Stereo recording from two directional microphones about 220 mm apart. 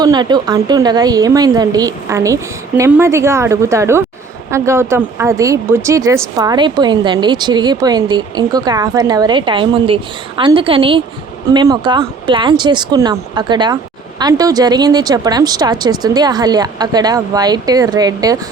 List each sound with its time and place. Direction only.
0.0 s speech: 20° right (ahead or behind)